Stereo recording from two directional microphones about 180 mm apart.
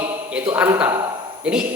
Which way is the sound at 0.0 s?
5° right (ahead or behind).